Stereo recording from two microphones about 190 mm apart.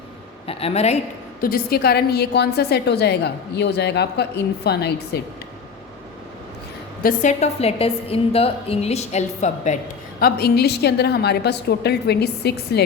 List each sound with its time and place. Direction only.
0.4 s a woman's voice: 35° left (ahead or behind)
1.4 s a woman's voice: 50° left (ahead or behind)
7.0 s a woman's voice: 45° left (ahead or behind)
10.2 s a woman's voice: 55° left (ahead or behind)